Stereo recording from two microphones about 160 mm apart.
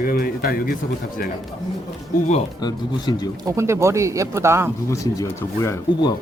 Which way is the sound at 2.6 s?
25° left (ahead or behind).